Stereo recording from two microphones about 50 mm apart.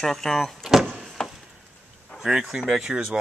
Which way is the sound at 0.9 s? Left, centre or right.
Centre.